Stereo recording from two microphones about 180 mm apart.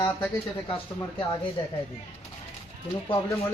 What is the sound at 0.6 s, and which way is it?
Speech, 30° left (ahead or behind).